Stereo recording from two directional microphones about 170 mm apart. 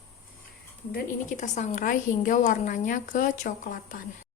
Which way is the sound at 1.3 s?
45° left (ahead or behind).